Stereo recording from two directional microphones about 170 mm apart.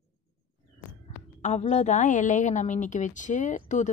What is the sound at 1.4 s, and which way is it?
A woman's voice, 40° left (ahead or behind).